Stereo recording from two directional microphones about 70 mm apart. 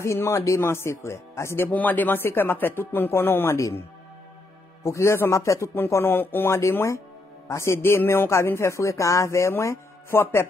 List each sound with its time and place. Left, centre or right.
0.0 s speech: left
1.7 s speech: left
3.5 s speech: left
4.8 s speech: left
5.9 s speech: left